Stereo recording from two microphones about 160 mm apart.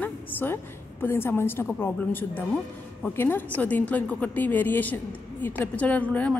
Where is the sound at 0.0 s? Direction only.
10° left (ahead or behind).